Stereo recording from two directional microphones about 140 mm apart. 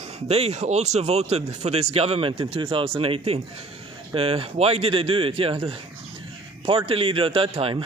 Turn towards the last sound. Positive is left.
turn(degrees=-40)  # may be behind; listen again after turning